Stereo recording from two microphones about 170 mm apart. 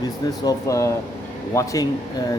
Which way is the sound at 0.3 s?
20° left (ahead or behind).